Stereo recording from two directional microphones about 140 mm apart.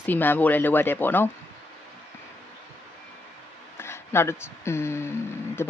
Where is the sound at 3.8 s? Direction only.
20° left (ahead or behind).